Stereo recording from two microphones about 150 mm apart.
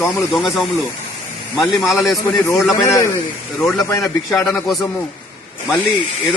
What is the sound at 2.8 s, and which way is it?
Speech, 20° left (ahead or behind).